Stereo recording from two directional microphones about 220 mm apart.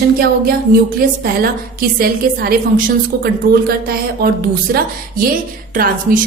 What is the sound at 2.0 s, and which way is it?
A woman's voice, 45° right (ahead or behind).